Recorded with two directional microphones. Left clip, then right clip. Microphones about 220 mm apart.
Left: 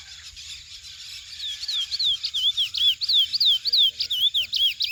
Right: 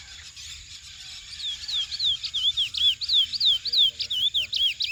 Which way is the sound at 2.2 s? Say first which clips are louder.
Left 2 dB; centre (ahead or behind).